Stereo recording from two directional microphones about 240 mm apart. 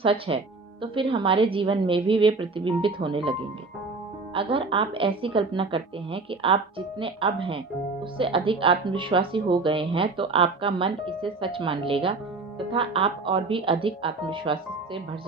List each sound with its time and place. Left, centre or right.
0.0 s speech: right
4.4 s speech: right